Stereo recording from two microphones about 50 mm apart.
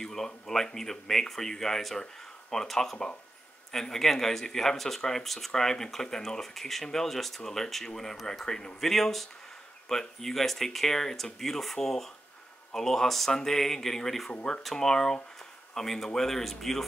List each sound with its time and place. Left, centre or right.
0.0 s speech: centre
14.3 s speech: centre
14.6 s speech: centre